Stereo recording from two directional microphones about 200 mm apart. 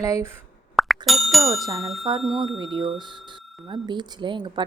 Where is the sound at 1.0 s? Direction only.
Centre (ahead or behind).